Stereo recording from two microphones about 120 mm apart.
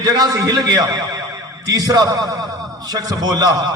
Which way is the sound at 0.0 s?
35° right (ahead or behind).